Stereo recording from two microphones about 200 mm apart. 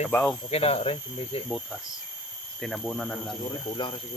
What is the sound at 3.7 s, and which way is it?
Speech, 25° left (ahead or behind).